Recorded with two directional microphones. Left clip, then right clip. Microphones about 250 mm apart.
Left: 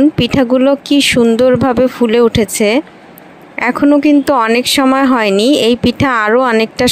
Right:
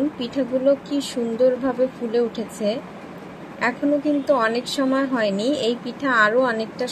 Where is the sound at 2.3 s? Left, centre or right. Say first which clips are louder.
Left 13 dB; left.